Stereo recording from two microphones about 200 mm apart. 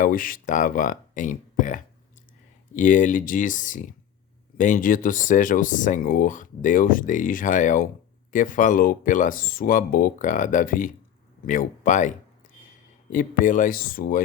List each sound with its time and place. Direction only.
0.0 s speech: 45° left (ahead or behind)